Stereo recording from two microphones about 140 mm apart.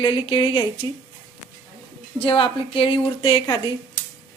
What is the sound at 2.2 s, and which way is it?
A woman's voice, 40° left (ahead or behind).